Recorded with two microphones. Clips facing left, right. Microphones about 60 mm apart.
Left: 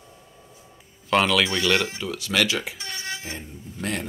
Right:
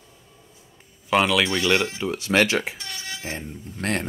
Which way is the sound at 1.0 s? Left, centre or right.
Centre.